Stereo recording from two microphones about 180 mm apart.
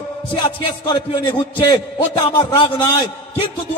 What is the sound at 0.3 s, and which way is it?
A man's voice, 25° left (ahead or behind).